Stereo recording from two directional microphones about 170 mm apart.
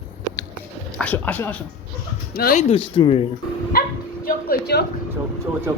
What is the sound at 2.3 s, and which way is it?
Speech, 60° left (ahead or behind).